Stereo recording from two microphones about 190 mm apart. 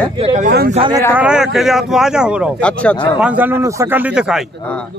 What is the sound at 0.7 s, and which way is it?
Speech, 30° right (ahead or behind).